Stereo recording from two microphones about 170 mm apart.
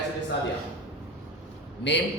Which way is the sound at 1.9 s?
90° left.